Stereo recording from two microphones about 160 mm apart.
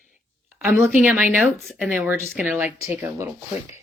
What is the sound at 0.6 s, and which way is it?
Speech, 10° right (ahead or behind).